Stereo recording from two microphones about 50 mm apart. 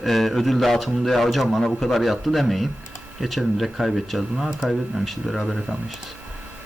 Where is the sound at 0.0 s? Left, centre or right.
Centre.